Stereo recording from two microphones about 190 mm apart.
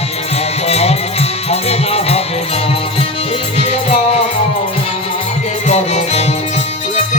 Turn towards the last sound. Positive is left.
turn(degrees=35)  # may be behind; listen again after turning